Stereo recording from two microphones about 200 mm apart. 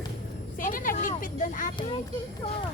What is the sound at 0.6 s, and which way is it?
Vehicle, 45° left (ahead or behind).